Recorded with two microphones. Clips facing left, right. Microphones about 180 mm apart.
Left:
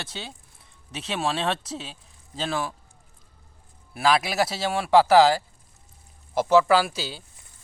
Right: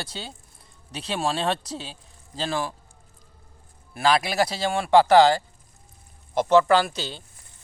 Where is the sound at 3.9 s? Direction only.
Centre (ahead or behind).